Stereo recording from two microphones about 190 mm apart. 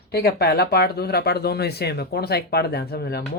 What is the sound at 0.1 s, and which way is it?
Speech, 55° left (ahead or behind).